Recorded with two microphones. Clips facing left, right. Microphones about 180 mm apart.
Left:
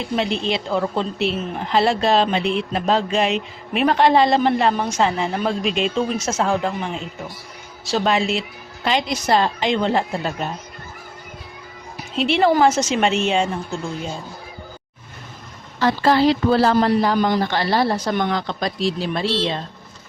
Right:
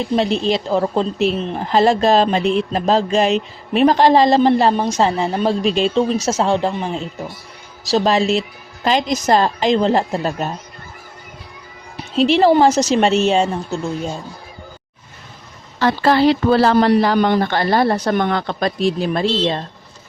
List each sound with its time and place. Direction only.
0.0 s a woman's voice: 40° right (ahead or behind)
11.9 s a woman's voice: 35° right (ahead or behind)
15.8 s a woman's voice: 65° right (ahead or behind)